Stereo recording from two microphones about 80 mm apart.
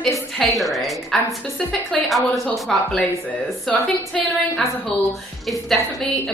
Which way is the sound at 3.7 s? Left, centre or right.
Centre.